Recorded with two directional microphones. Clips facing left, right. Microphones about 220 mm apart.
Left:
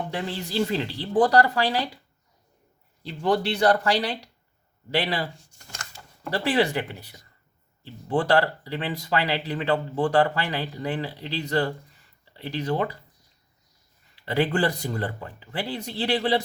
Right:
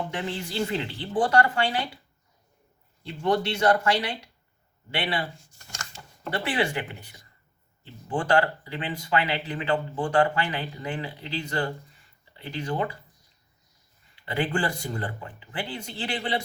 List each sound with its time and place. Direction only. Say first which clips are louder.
0.1 s speech: left 2 dB; 35° left (ahead or behind)
3.0 s speech: left 1 dB; 35° left (ahead or behind)
6.3 s speech: left 4 dB; 40° left (ahead or behind)
14.3 s speech: left 4 dB; 40° left (ahead or behind)